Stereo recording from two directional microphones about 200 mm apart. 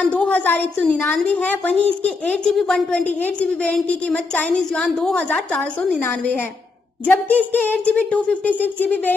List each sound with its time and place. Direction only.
0.0 s a woman's voice: 5° left (ahead or behind)